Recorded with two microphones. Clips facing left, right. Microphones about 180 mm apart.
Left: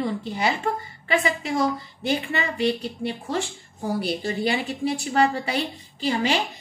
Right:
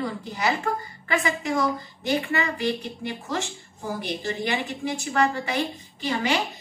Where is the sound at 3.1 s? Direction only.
30° left (ahead or behind).